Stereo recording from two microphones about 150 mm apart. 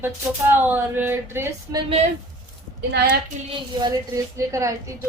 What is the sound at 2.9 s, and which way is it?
Speech, 90° right.